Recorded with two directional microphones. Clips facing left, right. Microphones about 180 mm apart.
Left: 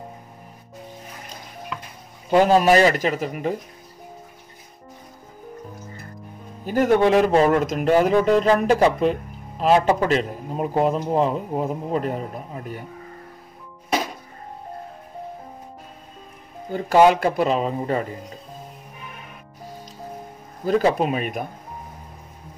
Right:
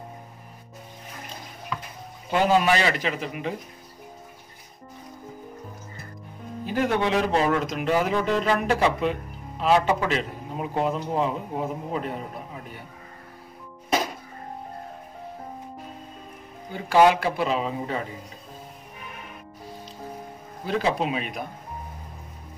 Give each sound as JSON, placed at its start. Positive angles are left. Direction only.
{"t": 2.3, "sound": "speech", "side_deg": 40}
{"t": 6.6, "sound": "a man's voice", "side_deg": 45}
{"t": 16.7, "sound": "speech", "side_deg": 40}
{"t": 20.6, "sound": "speech", "side_deg": 50}